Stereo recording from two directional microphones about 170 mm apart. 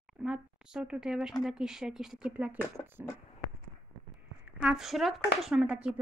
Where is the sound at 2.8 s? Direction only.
15° left (ahead or behind).